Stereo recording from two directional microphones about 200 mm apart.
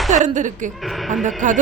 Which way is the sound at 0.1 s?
40° right (ahead or behind).